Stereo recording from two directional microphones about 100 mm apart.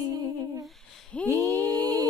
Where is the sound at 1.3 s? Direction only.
35° right (ahead or behind).